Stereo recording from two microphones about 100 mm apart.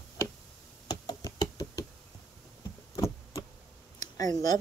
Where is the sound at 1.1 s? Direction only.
40° left (ahead or behind).